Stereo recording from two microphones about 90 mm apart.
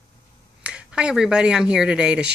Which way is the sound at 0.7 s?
10° right (ahead or behind).